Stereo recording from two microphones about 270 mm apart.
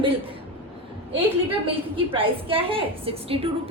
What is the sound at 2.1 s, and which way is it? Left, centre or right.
A woman's voice, centre.